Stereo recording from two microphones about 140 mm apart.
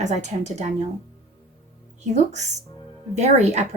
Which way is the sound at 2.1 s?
55° right (ahead or behind).